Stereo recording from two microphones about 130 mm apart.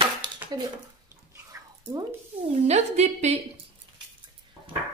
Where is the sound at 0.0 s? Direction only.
35° right (ahead or behind).